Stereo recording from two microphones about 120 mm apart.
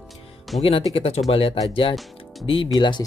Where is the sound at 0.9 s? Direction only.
55° left (ahead or behind).